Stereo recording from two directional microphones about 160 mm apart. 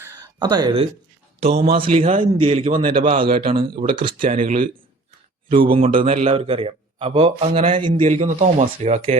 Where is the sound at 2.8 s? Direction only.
60° right (ahead or behind).